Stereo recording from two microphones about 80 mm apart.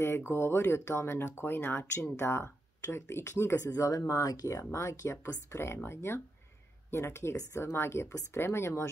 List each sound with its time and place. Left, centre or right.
0.3 s speech: left